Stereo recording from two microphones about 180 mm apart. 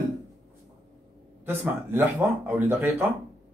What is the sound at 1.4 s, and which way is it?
Speech, 10° right (ahead or behind).